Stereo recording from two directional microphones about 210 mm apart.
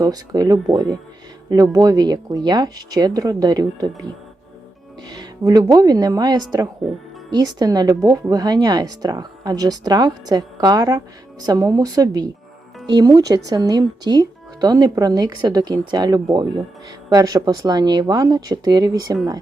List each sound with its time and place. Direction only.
0.0 s speech: 15° right (ahead or behind)
5.0 s speech: 20° right (ahead or behind)